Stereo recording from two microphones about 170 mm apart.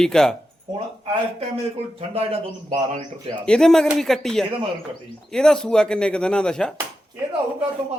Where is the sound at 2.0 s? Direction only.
35° right (ahead or behind).